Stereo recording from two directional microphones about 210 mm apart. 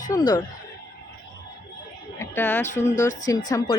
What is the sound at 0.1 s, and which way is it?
Speech, 15° left (ahead or behind).